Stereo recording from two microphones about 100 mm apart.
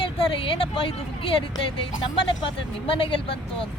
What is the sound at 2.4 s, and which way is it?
Speech, 60° left (ahead or behind).